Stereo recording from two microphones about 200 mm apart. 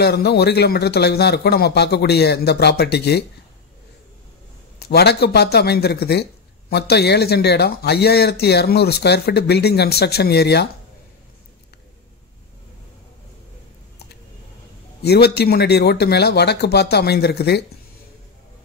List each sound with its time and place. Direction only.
0.0 s speech: 55° left (ahead or behind)
4.7 s speech: 55° left (ahead or behind)
15.0 s speech: 55° left (ahead or behind)